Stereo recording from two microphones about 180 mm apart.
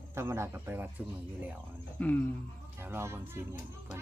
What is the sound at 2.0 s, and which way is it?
Speech, 10° left (ahead or behind).